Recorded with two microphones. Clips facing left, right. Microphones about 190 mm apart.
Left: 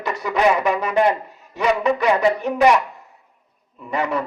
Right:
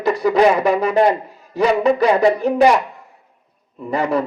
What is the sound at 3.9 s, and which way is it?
Speech, 35° right (ahead or behind).